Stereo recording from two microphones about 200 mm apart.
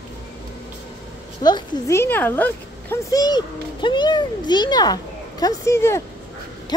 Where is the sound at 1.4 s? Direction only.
15° left (ahead or behind).